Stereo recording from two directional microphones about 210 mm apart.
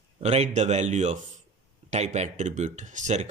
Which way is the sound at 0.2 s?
30° right (ahead or behind).